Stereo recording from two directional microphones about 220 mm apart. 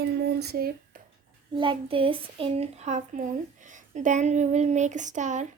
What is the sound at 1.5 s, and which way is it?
Speech, 20° right (ahead or behind).